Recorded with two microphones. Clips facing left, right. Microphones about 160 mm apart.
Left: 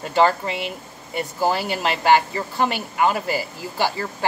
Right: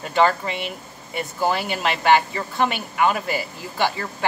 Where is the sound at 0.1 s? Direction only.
35° left (ahead or behind).